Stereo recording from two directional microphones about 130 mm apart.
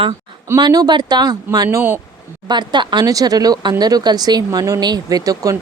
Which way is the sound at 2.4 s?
35° right (ahead or behind).